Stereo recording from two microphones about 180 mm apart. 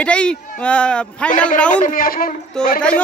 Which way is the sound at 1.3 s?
45° left (ahead or behind).